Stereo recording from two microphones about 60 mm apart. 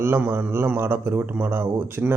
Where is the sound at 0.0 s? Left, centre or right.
Right.